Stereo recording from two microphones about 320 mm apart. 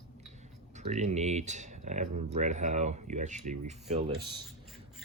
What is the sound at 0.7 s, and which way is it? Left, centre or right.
Speech, right.